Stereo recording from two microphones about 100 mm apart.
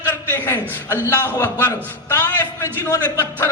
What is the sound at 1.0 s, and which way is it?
A man's voice, 25° left (ahead or behind).